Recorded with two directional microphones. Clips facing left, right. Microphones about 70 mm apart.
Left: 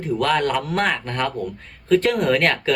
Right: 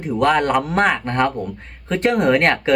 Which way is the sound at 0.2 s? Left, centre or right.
Centre.